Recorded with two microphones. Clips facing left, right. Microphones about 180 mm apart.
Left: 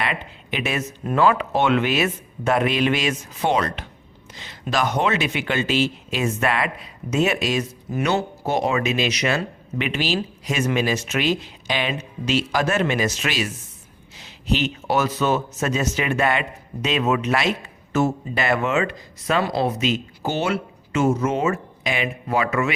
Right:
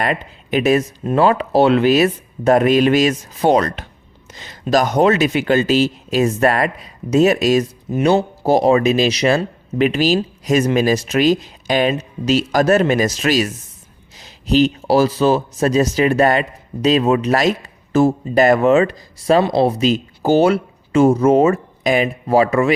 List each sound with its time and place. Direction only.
0.0 s speech: 40° right (ahead or behind)
7.9 s speech: 25° right (ahead or behind)